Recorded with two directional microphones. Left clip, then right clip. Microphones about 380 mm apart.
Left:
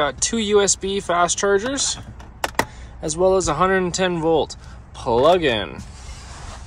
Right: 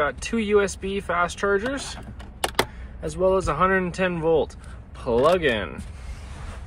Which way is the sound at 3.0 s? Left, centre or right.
Centre.